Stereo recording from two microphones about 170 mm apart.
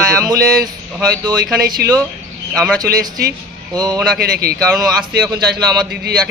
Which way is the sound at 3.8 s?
25° right (ahead or behind).